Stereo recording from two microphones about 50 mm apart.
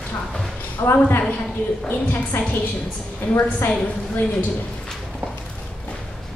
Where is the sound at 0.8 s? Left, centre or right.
Left.